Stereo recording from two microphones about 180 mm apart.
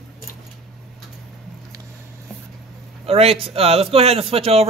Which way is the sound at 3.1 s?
30° right (ahead or behind).